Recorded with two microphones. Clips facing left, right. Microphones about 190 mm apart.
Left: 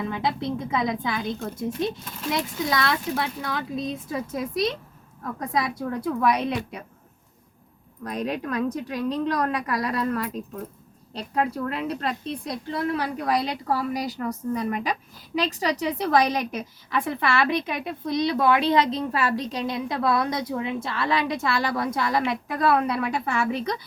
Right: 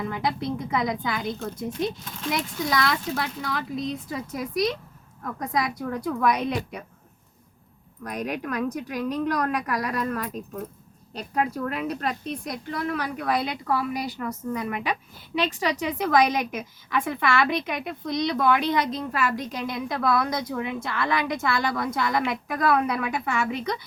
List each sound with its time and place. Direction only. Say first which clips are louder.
0.1 s a woman's voice: left 1 dB; 25° left (ahead or behind)
2.6 s a woman's voice: right 1 dB; 25° left (ahead or behind)
8.0 s a woman's voice: left 2 dB; 25° left (ahead or behind)
11.2 s a woman's voice: left 1 dB; 30° left (ahead or behind)